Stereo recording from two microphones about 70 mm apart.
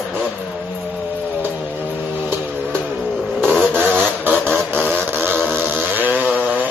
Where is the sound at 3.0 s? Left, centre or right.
Centre.